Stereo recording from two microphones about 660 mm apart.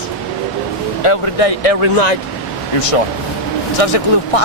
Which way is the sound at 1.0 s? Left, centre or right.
Left.